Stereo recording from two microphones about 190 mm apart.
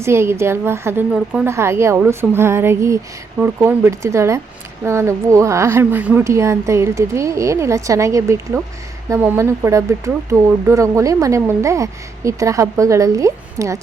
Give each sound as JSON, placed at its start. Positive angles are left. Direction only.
{"t": 0.0, "sound": "speech", "side_deg": -15}